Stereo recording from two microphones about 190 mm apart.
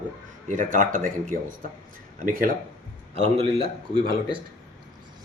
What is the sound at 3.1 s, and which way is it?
Speech, 35° right (ahead or behind).